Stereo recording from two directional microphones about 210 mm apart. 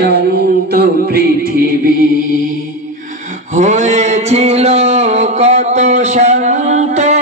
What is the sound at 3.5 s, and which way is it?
Mantra, 35° right (ahead or behind).